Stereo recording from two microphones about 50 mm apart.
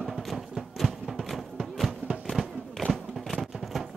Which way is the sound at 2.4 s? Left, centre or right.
Centre.